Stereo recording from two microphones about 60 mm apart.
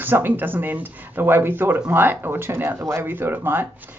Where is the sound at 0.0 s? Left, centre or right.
Right.